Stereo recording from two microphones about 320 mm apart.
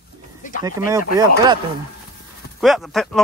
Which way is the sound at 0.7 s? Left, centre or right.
Centre.